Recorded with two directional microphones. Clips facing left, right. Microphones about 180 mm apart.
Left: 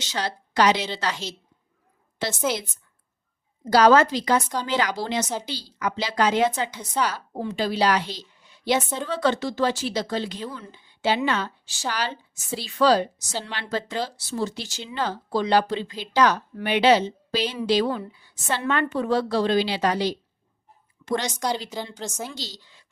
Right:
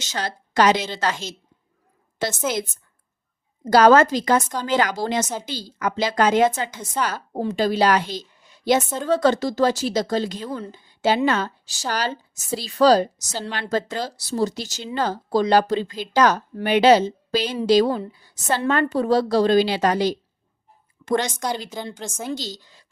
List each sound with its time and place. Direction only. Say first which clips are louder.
0.0 s a woman's voice: even; 45° right (ahead or behind)
2.3 s a woman's voice: left 2 dB; centre (ahead or behind)
3.6 s a woman's voice: right 3 dB; 50° right (ahead or behind)
21.3 s a woman's voice: even; centre (ahead or behind)
22.3 s a woman's voice: right 9 dB; 45° right (ahead or behind)